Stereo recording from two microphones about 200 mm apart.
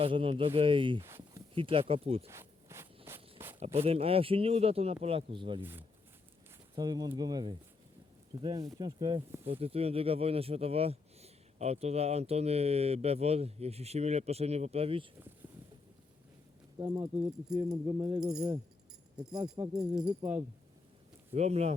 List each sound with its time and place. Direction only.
0.0 s a man's voice: 25° right (ahead or behind)
1.0 s a sound: 10° right (ahead or behind)
1.5 s a man's voice: 25° right (ahead or behind)
2.3 s zipper: 15° right (ahead or behind)
3.1 s a sound: 10° right (ahead or behind)
3.8 s a man's voice: 30° right (ahead or behind)
6.7 s a man's voice: 20° right (ahead or behind)
16.7 s a man's voice: 20° right (ahead or behind)
19.9 s speech: 5° right (ahead or behind)
21.3 s speech: 35° right (ahead or behind)